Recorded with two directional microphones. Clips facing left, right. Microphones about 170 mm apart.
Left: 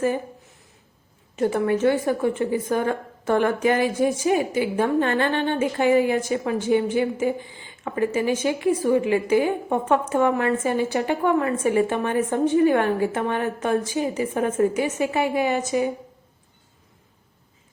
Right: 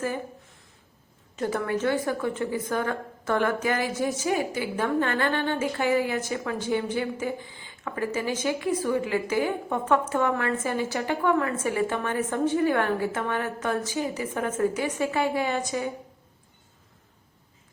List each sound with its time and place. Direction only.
1.4 s a woman's voice: 20° left (ahead or behind)